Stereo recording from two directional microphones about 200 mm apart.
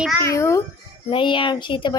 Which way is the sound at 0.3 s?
15° left (ahead or behind).